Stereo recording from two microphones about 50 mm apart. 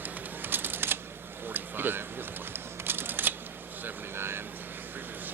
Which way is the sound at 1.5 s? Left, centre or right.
Right.